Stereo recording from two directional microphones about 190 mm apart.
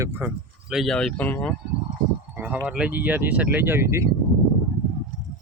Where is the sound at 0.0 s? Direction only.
10° right (ahead or behind); by 1.5 s 5° left (ahead or behind).